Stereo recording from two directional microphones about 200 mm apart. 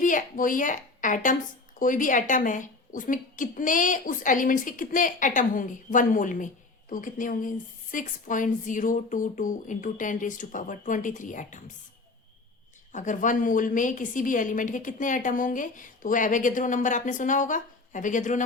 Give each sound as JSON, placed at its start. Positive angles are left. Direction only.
{"t": 0.0, "sound": "a woman's voice", "side_deg": 40}
{"t": 12.9, "sound": "a woman's voice", "side_deg": 40}